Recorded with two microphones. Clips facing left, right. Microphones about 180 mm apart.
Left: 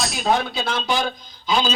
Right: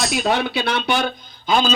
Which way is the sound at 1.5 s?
50° right (ahead or behind).